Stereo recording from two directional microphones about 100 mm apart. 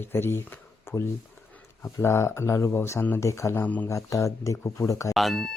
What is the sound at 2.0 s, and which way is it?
Speech, 25° left (ahead or behind).